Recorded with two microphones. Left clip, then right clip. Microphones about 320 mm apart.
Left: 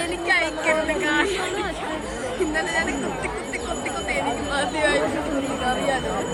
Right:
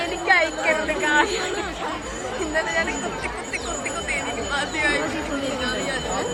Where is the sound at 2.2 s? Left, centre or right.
Centre.